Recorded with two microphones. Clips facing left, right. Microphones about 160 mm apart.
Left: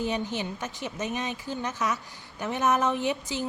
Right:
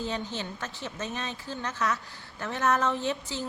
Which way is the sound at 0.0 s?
15° left (ahead or behind).